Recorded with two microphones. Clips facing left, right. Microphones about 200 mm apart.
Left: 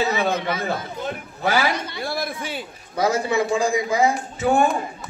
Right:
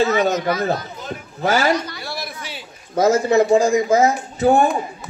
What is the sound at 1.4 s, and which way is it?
Speech, 45° right (ahead or behind).